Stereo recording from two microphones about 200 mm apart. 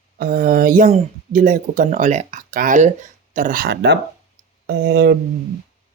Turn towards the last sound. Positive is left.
turn(degrees=-55)  # may be behind; listen again after turning